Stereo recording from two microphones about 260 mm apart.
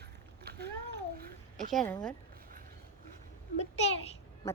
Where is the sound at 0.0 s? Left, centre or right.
Right.